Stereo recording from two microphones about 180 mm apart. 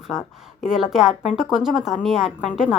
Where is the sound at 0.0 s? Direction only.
Centre (ahead or behind).